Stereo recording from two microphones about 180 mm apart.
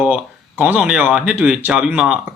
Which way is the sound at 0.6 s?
5° right (ahead or behind).